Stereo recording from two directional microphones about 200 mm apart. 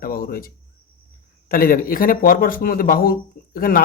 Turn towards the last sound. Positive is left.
turn(degrees=45)  # may be behind; listen again after turning